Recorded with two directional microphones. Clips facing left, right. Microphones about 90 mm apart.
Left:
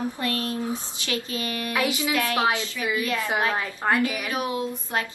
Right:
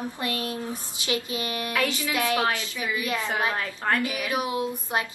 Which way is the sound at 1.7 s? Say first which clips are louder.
Left 3 dB; 15° left (ahead or behind).